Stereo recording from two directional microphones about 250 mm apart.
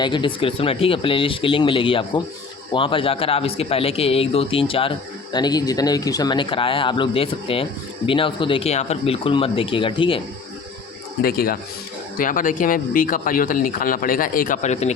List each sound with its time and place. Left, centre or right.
0.0 s a man's voice: centre
11.2 s speech: left